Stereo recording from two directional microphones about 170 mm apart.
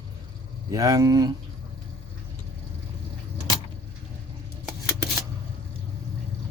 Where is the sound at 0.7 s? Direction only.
20° right (ahead or behind).